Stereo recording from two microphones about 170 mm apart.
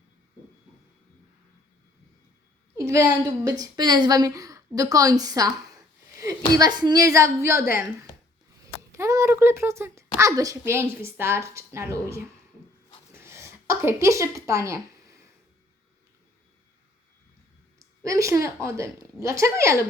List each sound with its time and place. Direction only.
2.7 s a woman's voice: 15° right (ahead or behind)
6.5 s a woman's voice: 25° right (ahead or behind)
8.9 s a child's voice: 15° right (ahead or behind)
13.1 s a sound: 15° right (ahead or behind)
17.7 s a woman's voice: 20° right (ahead or behind)